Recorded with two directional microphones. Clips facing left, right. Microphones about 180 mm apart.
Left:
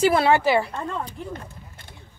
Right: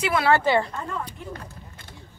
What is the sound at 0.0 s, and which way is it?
Speech, 35° left (ahead or behind).